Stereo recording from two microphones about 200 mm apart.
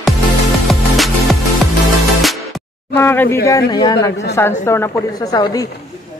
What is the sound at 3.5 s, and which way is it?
Speech, 20° left (ahead or behind).